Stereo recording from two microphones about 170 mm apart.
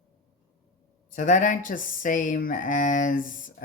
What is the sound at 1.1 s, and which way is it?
Speech, 50° left (ahead or behind).